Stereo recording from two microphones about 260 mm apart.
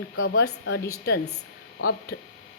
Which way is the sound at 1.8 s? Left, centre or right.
Left.